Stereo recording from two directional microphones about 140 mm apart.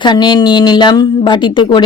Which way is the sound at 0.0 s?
30° left (ahead or behind).